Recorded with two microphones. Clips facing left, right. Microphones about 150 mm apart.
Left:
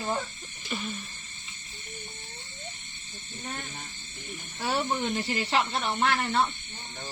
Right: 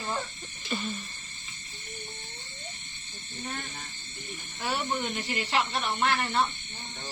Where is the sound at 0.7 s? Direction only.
5° left (ahead or behind).